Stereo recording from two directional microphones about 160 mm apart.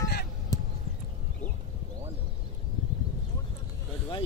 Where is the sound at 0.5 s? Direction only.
25° left (ahead or behind).